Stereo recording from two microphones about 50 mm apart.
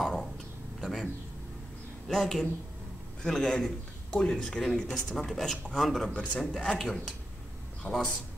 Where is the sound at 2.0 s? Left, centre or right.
Centre.